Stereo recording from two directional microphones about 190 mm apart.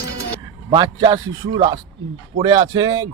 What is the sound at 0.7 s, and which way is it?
A man's voice, 25° right (ahead or behind).